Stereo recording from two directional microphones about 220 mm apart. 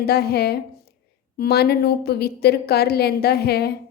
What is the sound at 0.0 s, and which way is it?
A woman's voice, 45° left (ahead or behind).